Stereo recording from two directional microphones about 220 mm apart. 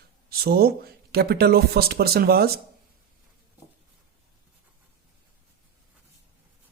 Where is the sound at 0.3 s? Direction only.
45° right (ahead or behind).